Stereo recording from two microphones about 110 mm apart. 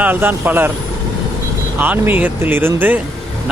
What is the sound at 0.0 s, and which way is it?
Speech, 15° right (ahead or behind).